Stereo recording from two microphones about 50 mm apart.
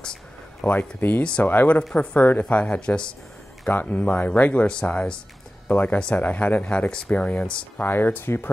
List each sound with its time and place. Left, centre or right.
0.7 s speech: left
5.7 s speech: left
6.9 s speech: left
7.8 s speech: left